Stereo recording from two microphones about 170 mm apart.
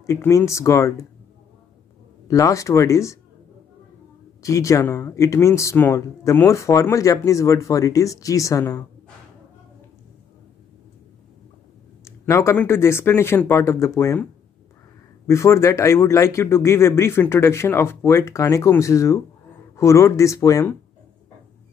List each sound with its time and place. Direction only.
0.0 s speech: 15° left (ahead or behind)
2.2 s speech: 20° left (ahead or behind)
4.4 s speech: 20° left (ahead or behind)
12.0 s speech: 15° left (ahead or behind)
15.2 s speech: 15° left (ahead or behind)